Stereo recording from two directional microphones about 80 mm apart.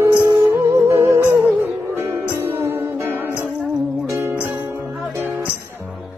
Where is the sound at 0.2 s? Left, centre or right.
Right.